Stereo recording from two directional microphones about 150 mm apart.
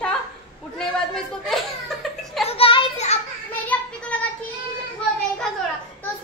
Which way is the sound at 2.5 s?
40° left (ahead or behind).